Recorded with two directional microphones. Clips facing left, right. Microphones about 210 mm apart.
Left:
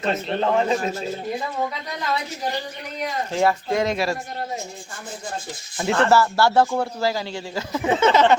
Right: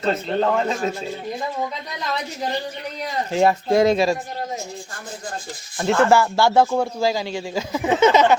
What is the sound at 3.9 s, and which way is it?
Speech, 20° right (ahead or behind).